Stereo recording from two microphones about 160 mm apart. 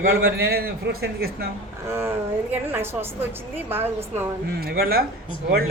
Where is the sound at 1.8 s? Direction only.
15° right (ahead or behind).